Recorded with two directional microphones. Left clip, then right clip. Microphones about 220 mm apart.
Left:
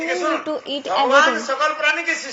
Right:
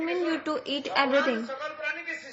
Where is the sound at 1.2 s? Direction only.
45° left (ahead or behind).